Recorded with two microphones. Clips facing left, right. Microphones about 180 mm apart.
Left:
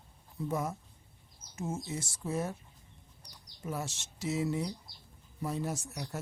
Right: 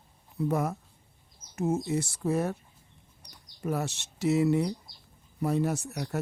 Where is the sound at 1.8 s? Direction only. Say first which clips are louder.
Right 9 dB; 65° right (ahead or behind).